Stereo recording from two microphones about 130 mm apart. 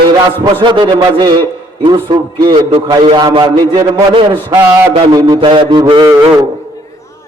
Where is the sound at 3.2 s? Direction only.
35° right (ahead or behind).